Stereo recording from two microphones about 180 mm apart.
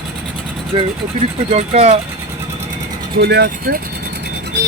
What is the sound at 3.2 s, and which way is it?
Speech, 65° right (ahead or behind).